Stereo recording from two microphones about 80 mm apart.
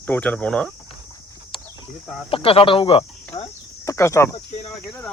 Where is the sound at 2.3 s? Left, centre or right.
Left.